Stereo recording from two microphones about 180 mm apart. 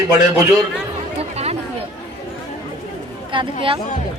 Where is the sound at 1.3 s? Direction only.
35° right (ahead or behind).